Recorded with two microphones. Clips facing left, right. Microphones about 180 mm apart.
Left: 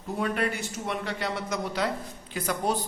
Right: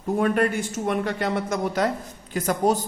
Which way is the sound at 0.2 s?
50° right (ahead or behind).